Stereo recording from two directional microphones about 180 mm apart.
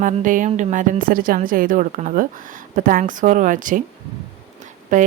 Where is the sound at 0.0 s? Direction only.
45° right (ahead or behind).